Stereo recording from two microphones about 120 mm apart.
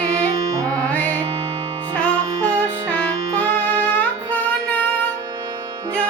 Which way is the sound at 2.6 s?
15° left (ahead or behind).